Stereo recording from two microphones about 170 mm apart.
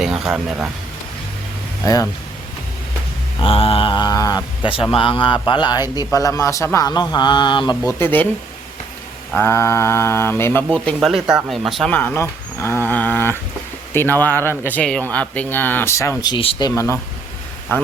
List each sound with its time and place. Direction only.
0.0 s speech: 5° right (ahead or behind)
1.8 s speech: 20° left (ahead or behind)
3.4 s speech: 35° left (ahead or behind); by 8.3 s 10° left (ahead or behind)
9.4 s speech: 15° left (ahead or behind)